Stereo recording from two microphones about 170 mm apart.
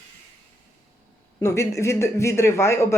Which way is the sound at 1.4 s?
15° left (ahead or behind).